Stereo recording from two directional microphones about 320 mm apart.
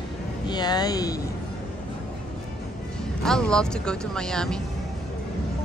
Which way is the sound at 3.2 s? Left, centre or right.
Centre.